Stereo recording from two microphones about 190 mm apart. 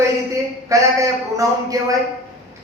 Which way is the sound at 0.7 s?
15° right (ahead or behind).